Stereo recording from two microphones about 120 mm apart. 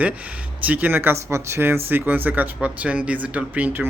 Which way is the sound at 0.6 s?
15° right (ahead or behind).